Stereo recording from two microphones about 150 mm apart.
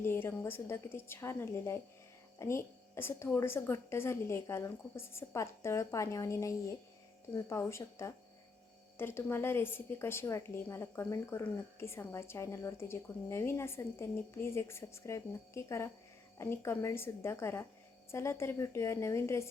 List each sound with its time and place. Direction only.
0.0 s a woman's voice: 15° left (ahead or behind)